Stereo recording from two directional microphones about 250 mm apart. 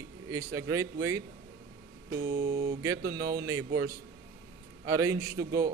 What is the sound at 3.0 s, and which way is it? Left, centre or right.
Speech, right.